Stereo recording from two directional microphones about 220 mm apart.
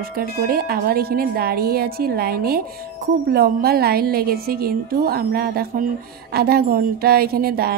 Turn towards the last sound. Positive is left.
turn(degrees=-45)  # may be behind; listen again after turning